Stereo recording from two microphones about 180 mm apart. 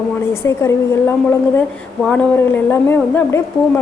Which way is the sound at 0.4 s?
15° left (ahead or behind).